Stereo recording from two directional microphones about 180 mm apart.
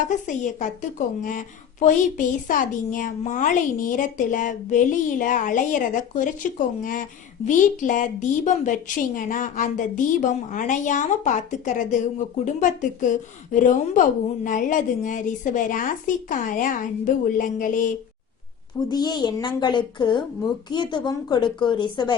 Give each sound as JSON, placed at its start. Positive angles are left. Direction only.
{"t": 0.1, "sound": "a woman's voice", "side_deg": 45}
{"t": 18.9, "sound": "a woman's voice", "side_deg": 25}